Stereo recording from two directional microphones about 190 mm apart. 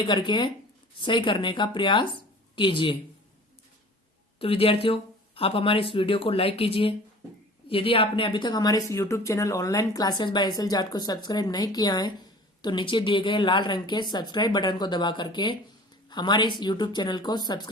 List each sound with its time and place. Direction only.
0.1 s a woman's voice: 25° left (ahead or behind)
4.4 s a woman's voice: 30° left (ahead or behind)